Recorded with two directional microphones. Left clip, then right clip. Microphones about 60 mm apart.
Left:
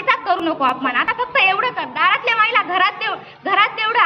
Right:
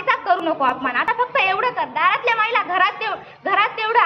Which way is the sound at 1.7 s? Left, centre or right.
Centre.